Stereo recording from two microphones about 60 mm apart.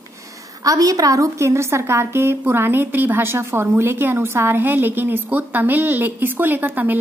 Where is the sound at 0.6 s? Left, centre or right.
Right.